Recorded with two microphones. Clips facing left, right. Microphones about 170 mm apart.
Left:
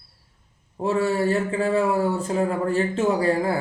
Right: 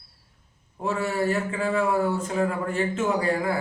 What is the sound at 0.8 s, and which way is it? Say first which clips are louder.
Speech: left 4 dB; 30° left (ahead or behind).